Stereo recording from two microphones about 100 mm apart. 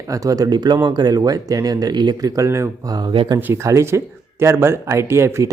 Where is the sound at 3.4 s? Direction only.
30° right (ahead or behind).